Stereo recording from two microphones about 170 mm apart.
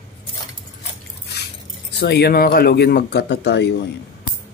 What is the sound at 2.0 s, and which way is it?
Speech, 70° left (ahead or behind).